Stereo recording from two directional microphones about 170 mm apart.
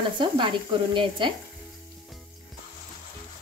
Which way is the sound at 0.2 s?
30° right (ahead or behind).